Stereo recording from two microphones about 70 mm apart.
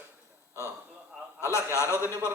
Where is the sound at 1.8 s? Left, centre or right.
Right.